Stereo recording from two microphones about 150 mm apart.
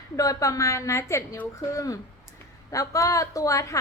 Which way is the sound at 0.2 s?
20° left (ahead or behind).